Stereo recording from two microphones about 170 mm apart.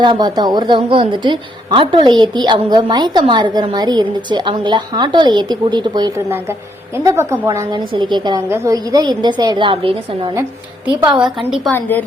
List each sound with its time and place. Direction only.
0.0 s a woman's voice: 25° right (ahead or behind)
6.3 s a woman's voice: 15° right (ahead or behind); by 10.3 s 30° right (ahead or behind)
11.2 s a woman's voice: centre (ahead or behind)
11.7 s a woman's voice: 10° left (ahead or behind)